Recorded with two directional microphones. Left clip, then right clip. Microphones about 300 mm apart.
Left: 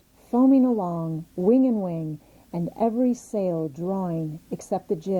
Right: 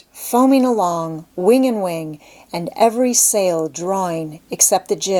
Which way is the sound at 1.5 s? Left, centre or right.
Centre.